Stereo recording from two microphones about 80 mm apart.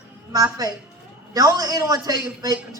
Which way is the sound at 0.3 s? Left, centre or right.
Right.